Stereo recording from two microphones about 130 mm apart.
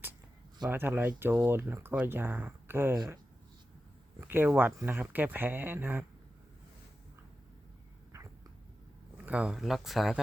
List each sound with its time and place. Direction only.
0.7 s speech: 15° right (ahead or behind)
4.2 s speech: 15° right (ahead or behind)
9.1 s speech: 10° right (ahead or behind)